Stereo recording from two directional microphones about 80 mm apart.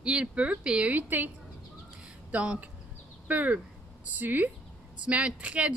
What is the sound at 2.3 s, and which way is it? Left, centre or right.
A woman's voice, centre.